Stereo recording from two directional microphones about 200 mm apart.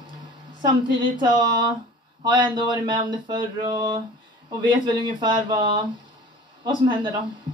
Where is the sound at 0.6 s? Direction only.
20° right (ahead or behind).